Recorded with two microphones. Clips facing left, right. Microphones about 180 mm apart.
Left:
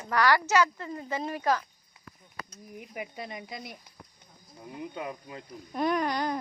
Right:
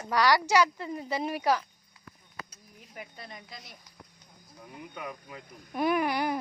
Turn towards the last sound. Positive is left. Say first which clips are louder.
# right 1 dB
turn(degrees=-10)  # may be behind; listen again after turning